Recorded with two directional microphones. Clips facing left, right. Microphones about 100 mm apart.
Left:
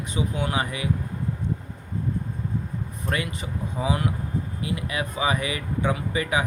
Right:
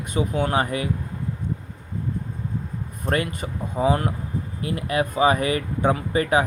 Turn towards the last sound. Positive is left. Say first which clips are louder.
# right 5 dB
turn(degrees=-40)  # may be behind; listen again after turning